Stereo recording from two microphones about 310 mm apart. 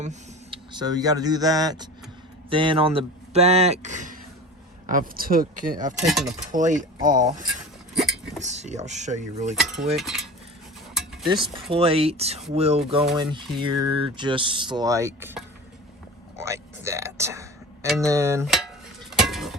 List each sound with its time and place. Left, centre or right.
0.0 s speech: centre
6.1 s a sound: centre
6.5 s speech: right
7.9 s vehicle: centre
8.4 s speech: right
9.6 s a sound: centre
11.3 s speech: centre
19.1 s dishes: centre